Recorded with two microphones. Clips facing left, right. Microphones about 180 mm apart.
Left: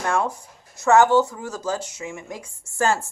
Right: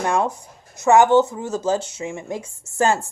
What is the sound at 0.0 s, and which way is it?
Speech, 20° right (ahead or behind).